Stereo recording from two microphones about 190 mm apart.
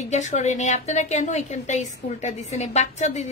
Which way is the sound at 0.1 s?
35° left (ahead or behind).